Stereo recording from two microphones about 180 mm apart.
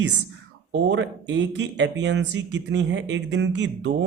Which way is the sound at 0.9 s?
90° right.